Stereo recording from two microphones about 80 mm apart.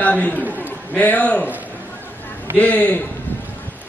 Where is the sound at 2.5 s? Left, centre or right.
Centre.